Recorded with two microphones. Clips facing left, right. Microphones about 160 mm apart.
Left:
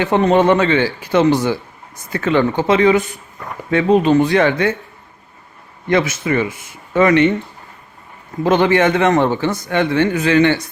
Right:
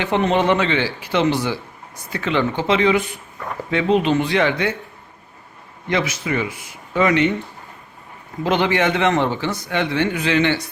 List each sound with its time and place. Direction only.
0.0 s a man's voice: 45° left (ahead or behind)
5.9 s a man's voice: 50° left (ahead or behind)
8.4 s a man's voice: 45° left (ahead or behind)